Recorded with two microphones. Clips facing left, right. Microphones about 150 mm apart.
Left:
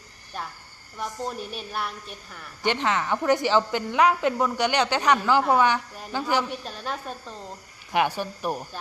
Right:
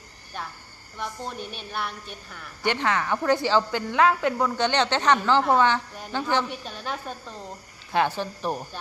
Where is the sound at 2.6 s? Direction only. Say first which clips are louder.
Even; 20° left (ahead or behind).